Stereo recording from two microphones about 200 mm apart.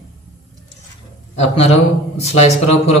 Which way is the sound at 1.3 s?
30° left (ahead or behind).